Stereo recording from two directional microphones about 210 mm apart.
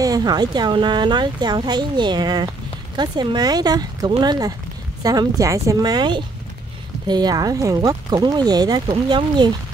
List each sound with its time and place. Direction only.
0.0 s speech: 20° right (ahead or behind)